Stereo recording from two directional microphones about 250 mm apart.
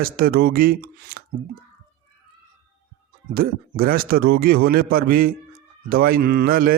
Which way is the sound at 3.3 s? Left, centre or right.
Right.